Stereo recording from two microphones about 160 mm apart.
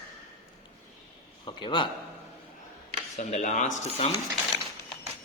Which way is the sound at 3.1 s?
50° left (ahead or behind).